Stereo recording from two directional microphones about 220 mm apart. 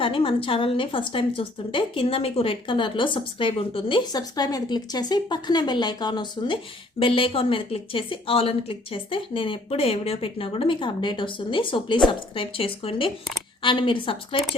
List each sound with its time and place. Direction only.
0.0 s a woman's voice: 25° left (ahead or behind)